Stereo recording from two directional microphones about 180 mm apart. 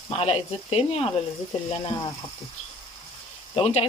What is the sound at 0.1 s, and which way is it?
Speech, 35° left (ahead or behind).